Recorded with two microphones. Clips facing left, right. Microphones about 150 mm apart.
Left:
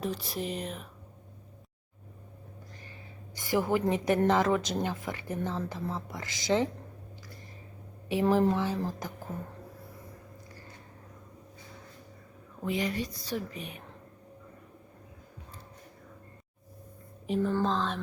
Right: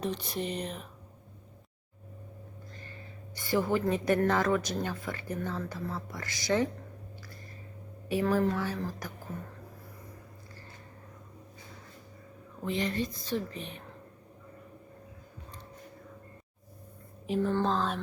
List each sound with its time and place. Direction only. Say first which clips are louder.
0.0 s speech: even; centre (ahead or behind)
3.3 s speech: left 1 dB; 15° left (ahead or behind)
8.1 s speech: left 2 dB; 20° left (ahead or behind)
12.6 s speech: even; 10° left (ahead or behind)
17.2 s speech: even; centre (ahead or behind)